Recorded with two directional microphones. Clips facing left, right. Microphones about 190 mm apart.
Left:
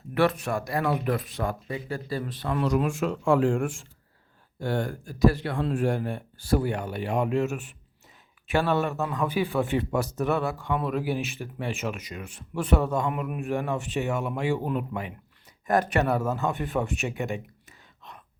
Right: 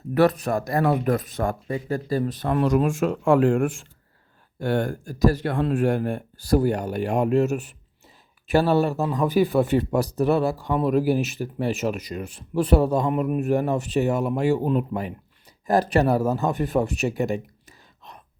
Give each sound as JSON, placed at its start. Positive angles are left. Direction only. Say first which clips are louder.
{"t": 0.1, "sound": "speech", "louder": "right 5 dB", "side_deg": -40}
{"t": 4.9, "sound": "speech", "louder": "right 1 dB", "side_deg": -45}
{"t": 5.5, "sound": "speech", "louder": "right 4 dB", "side_deg": -60}